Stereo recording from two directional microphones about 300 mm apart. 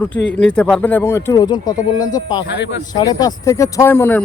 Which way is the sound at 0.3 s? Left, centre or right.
Centre.